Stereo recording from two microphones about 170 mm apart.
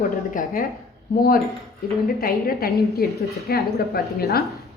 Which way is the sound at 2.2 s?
60° left (ahead or behind).